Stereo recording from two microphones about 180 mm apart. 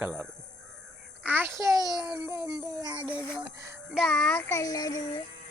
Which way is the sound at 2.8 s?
25° right (ahead or behind).